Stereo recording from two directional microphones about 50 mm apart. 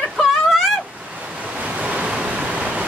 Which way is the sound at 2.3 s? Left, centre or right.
Centre.